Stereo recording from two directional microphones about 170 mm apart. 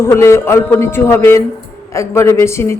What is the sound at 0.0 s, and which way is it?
Speech, 15° left (ahead or behind).